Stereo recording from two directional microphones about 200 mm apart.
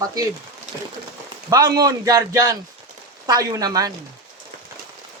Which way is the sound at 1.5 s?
20° right (ahead or behind).